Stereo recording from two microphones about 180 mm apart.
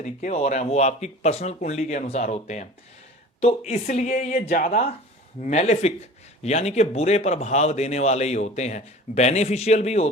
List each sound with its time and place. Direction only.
0.0 s a man's voice: 40° left (ahead or behind)
3.7 s a man's voice: 40° left (ahead or behind)